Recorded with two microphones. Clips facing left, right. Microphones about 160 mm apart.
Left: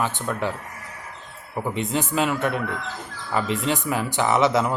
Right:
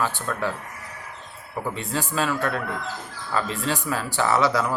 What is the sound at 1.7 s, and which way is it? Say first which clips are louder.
Speech: left 4 dB; 20° left (ahead or behind).